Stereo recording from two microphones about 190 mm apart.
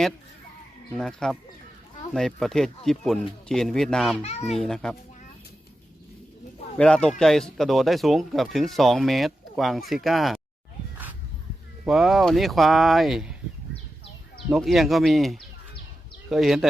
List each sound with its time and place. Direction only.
0.9 s speech: centre (ahead or behind)
4.2 s a child's voice: 35° left (ahead or behind)
4.5 s speech: centre (ahead or behind)
6.7 s speech: 5° left (ahead or behind)
11.9 s speech: centre (ahead or behind)
14.5 s speech: centre (ahead or behind)